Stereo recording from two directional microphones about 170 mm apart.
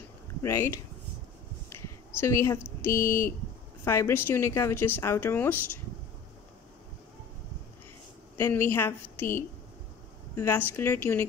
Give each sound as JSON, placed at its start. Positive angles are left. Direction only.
{"t": 0.4, "sound": "speech", "side_deg": 15}
{"t": 1.7, "sound": "a sound", "side_deg": 15}
{"t": 2.8, "sound": "speech", "side_deg": 15}
{"t": 8.4, "sound": "speech", "side_deg": 15}